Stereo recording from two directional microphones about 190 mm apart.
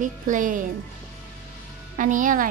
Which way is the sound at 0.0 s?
45° right (ahead or behind).